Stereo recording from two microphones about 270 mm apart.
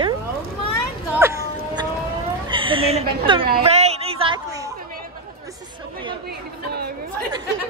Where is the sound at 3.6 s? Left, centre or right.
Right.